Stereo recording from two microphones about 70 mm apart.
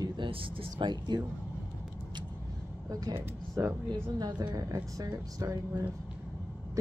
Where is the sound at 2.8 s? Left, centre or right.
Right.